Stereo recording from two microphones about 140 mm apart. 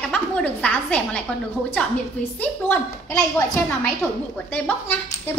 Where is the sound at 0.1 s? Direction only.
10° left (ahead or behind).